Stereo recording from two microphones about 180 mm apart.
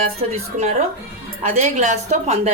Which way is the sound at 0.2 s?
35° right (ahead or behind).